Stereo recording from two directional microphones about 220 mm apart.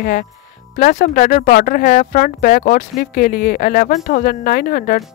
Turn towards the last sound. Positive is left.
turn(degrees=40)  # may be behind; listen again after turning